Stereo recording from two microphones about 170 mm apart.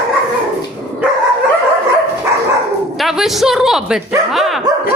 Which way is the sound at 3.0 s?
Centre (ahead or behind).